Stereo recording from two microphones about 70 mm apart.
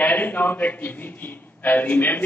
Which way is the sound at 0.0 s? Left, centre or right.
Left.